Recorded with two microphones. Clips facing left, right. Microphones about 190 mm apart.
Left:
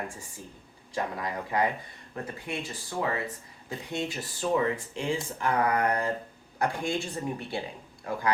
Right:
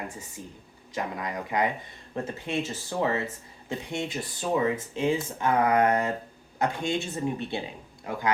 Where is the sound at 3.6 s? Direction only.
20° right (ahead or behind).